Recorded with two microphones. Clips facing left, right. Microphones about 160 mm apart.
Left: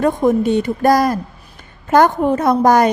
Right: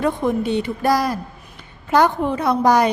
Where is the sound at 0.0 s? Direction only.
45° left (ahead or behind).